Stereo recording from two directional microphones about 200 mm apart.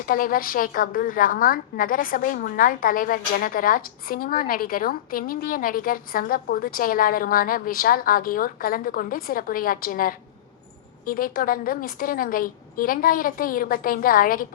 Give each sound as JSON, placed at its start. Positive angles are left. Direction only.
{"t": 0.0, "sound": "a woman's voice", "side_deg": 45}